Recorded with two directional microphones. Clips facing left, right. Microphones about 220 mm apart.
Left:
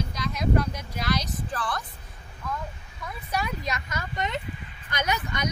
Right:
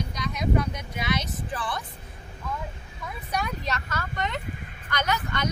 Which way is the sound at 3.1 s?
5° left (ahead or behind).